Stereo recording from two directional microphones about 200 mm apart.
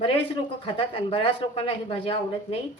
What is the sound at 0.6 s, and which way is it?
Speech, 25° left (ahead or behind).